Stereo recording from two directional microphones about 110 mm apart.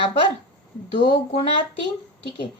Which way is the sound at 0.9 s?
55° left (ahead or behind).